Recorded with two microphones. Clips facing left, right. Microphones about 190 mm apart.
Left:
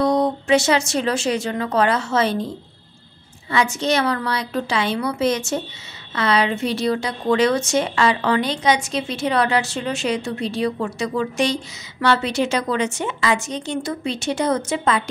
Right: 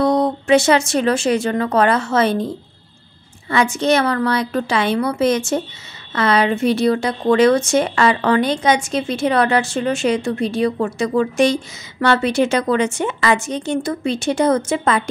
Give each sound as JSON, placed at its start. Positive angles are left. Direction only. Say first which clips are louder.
{"t": 0.0, "sound": "speech", "louder": "right 2 dB", "side_deg": -55}
{"t": 3.4, "sound": "a woman's voice", "louder": "right 4 dB", "side_deg": -55}